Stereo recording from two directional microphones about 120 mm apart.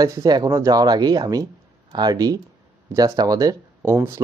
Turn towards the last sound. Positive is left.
turn(degrees=-20)  # may be behind; listen again after turning